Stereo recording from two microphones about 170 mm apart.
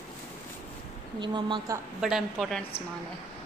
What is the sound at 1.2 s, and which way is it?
Speech, 25° right (ahead or behind).